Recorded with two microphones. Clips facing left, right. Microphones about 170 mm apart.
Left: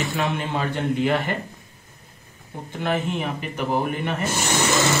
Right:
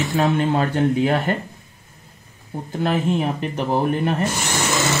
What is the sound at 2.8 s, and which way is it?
Speech, 35° right (ahead or behind).